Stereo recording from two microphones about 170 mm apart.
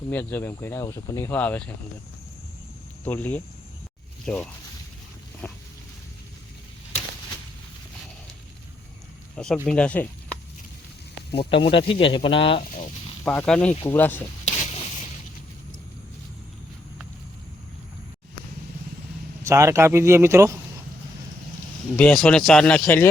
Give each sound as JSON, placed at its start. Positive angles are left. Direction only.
{"t": 0.1, "sound": "speech", "side_deg": 10}
{"t": 3.0, "sound": "speech", "side_deg": 10}
{"t": 5.4, "sound": "speech", "side_deg": 10}
{"t": 9.3, "sound": "speech", "side_deg": 5}
{"t": 11.3, "sound": "speech", "side_deg": 30}
{"t": 13.2, "sound": "speech", "side_deg": 5}
{"t": 14.4, "sound": "a sound", "side_deg": 45}
{"t": 19.4, "sound": "speech", "side_deg": -15}
{"t": 21.9, "sound": "speech", "side_deg": 5}